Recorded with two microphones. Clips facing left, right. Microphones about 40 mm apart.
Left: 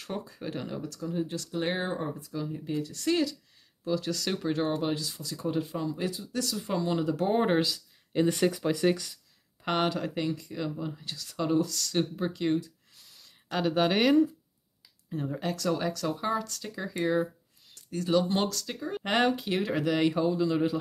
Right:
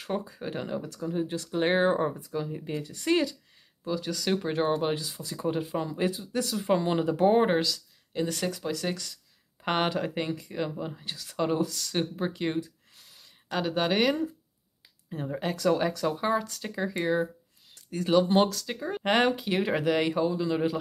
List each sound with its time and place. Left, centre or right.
0.0 s speech: centre
3.8 s speech: centre
5.8 s speech: right
7.6 s speech: centre
9.6 s speech: centre
13.2 s speech: centre
15.0 s speech: centre
19.6 s speech: centre